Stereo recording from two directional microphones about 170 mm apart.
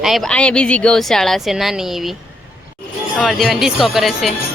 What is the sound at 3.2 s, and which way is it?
Speech, centre (ahead or behind).